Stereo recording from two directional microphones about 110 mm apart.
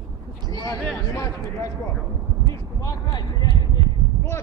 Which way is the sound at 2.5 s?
35° left (ahead or behind).